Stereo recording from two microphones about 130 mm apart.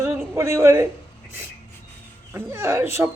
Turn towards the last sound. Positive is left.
turn(degrees=-20)  # may be behind; listen again after turning